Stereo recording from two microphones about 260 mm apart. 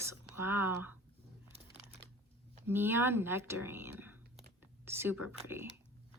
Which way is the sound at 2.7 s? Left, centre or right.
Centre.